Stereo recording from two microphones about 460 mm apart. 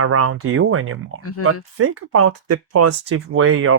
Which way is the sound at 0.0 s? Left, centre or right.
Right.